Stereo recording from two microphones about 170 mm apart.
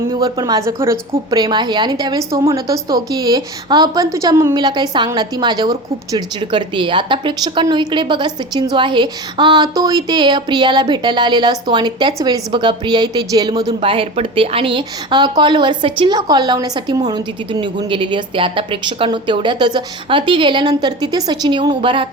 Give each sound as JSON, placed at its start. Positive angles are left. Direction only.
{"t": 0.0, "sound": "a woman's voice", "side_deg": -25}